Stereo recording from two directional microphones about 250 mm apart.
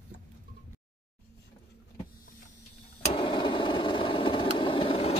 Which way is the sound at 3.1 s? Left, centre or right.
Centre.